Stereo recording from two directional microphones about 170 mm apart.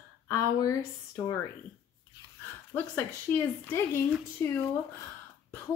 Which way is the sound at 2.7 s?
15° left (ahead or behind).